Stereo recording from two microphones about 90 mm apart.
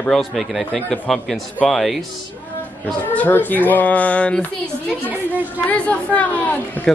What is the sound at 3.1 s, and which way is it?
Speech, 20° left (ahead or behind).